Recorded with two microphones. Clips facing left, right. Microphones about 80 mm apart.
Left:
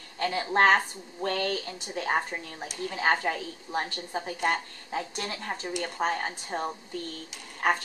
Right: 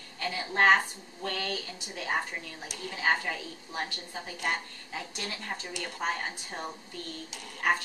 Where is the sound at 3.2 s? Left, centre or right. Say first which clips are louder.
Left 5 dB; left.